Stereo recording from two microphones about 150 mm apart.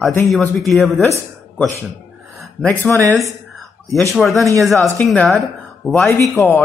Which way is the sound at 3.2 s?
Centre (ahead or behind).